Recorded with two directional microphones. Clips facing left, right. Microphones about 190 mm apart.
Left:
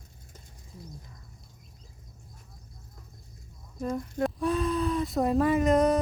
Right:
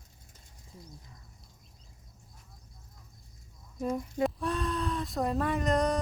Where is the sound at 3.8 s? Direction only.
5° right (ahead or behind).